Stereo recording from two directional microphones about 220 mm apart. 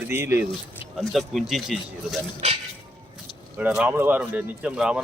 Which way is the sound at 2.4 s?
30° right (ahead or behind).